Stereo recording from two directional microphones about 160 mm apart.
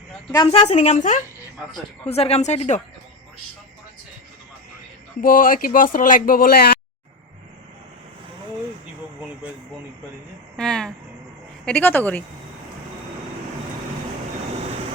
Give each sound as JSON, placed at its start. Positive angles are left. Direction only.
{"t": 0.5, "sound": "a woman's voice", "side_deg": 45}
{"t": 2.0, "sound": "a woman's voice", "side_deg": 40}
{"t": 5.2, "sound": "speech", "side_deg": 60}
{"t": 10.6, "sound": "speech", "side_deg": 5}